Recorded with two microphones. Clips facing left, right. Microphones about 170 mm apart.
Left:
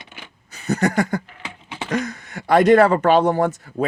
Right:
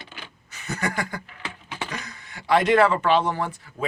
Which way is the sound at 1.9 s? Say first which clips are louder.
Left 13 dB; 45° left (ahead or behind).